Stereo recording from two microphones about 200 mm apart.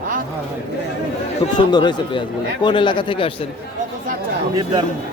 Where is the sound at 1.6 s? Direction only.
20° left (ahead or behind).